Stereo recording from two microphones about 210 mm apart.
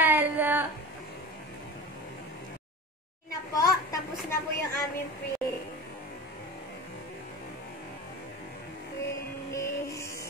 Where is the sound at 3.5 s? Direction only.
15° left (ahead or behind).